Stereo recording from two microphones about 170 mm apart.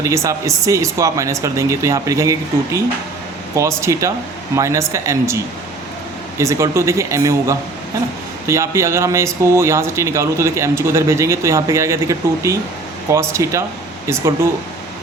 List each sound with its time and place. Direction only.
0.0 s speech: 20° right (ahead or behind)
3.5 s speech: 15° right (ahead or behind)